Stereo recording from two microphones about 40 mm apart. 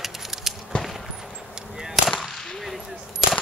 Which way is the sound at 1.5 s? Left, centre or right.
Centre.